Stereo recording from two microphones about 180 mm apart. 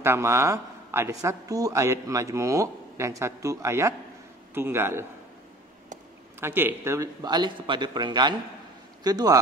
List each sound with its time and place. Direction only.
0.0 s a man's voice: 15° right (ahead or behind)
6.4 s speech: 15° right (ahead or behind)